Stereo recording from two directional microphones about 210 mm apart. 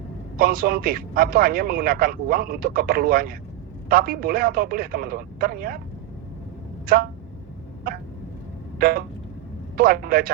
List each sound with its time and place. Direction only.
0.3 s a man's voice: 45° right (ahead or behind)
6.8 s speech: 45° right (ahead or behind)
8.8 s a man's voice: 45° right (ahead or behind)